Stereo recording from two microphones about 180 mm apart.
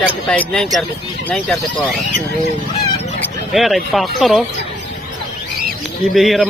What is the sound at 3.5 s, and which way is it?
Speech, centre (ahead or behind).